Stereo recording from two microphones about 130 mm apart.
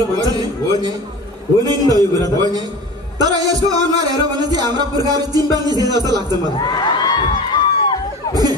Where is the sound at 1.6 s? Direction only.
30° right (ahead or behind).